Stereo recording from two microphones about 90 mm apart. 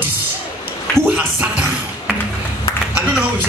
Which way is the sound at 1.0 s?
15° right (ahead or behind).